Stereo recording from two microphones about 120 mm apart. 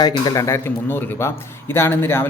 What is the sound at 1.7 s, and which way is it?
Speech, 20° left (ahead or behind).